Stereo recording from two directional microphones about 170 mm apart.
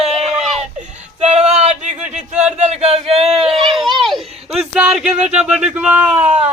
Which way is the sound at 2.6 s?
40° right (ahead or behind).